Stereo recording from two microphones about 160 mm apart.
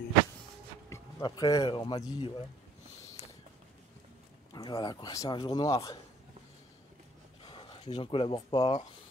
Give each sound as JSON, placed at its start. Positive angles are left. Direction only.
{"t": 0.8, "sound": "speech", "side_deg": 20}
{"t": 3.2, "sound": "a sound", "side_deg": 40}
{"t": 4.5, "sound": "speech", "side_deg": 25}
{"t": 7.9, "sound": "speech", "side_deg": 35}